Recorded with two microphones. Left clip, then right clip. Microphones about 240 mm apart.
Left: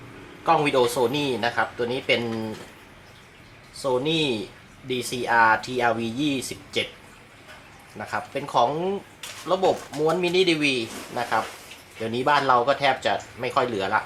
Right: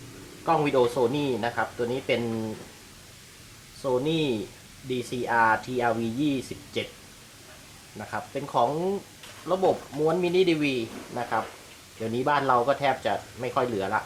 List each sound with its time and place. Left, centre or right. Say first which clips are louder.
0.4 s speech: left 3 dB; centre
4.0 s speech: left 3 dB; centre
7.9 s speech: left 4 dB; centre
8.6 s speech: left 2 dB; right
10.1 s speech: left 2 dB; centre